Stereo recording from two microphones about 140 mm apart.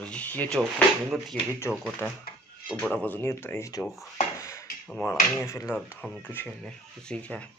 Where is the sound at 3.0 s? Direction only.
15° left (ahead or behind).